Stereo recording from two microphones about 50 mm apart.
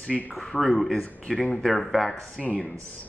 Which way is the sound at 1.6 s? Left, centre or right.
Centre.